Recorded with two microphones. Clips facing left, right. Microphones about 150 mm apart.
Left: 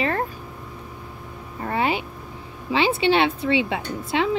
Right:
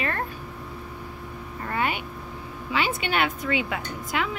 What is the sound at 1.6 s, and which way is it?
A woman's voice, 30° left (ahead or behind).